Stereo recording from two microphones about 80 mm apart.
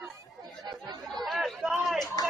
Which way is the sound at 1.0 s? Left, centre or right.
Centre.